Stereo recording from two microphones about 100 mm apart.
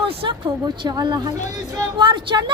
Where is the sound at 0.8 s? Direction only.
45° right (ahead or behind).